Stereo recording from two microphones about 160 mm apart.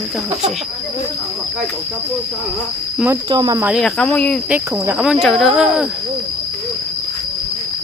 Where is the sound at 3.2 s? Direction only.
25° right (ahead or behind).